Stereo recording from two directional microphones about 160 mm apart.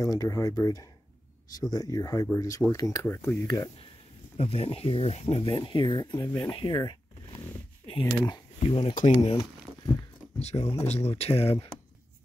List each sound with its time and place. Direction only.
0.0 s speech: 20° left (ahead or behind)
4.4 s speech: 35° left (ahead or behind)
8.0 s speech: 20° left (ahead or behind)
8.5 s speech: 35° left (ahead or behind)